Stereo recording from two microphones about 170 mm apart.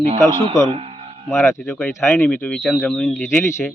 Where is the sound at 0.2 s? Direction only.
15° left (ahead or behind).